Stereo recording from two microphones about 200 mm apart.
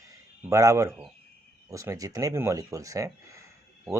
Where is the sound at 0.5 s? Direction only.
15° right (ahead or behind).